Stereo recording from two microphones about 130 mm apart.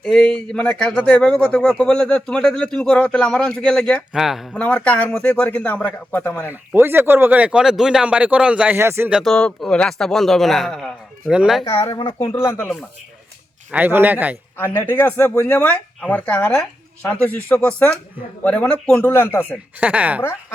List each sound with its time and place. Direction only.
0.0 s a man's voice: 5° left (ahead or behind)
4.5 s speech: 10° left (ahead or behind)
6.5 s speech: 15° right (ahead or behind)
9.1 s a man's voice: 5° left (ahead or behind)
11.9 s speech: 30° left (ahead or behind)
13.7 s speech: 10° right (ahead or behind)
14.8 s speech: 15° left (ahead or behind)
19.8 s speech: 10° right (ahead or behind)